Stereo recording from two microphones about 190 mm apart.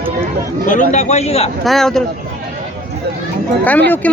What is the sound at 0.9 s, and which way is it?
Speech, 35° left (ahead or behind).